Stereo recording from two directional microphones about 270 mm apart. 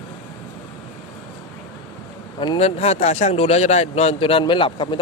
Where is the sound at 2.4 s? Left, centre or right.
Centre.